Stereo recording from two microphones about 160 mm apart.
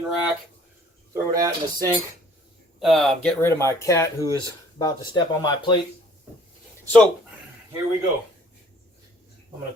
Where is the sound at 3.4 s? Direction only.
15° left (ahead or behind).